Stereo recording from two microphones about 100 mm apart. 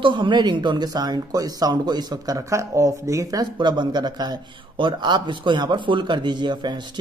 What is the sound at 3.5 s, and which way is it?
Speech, 50° right (ahead or behind).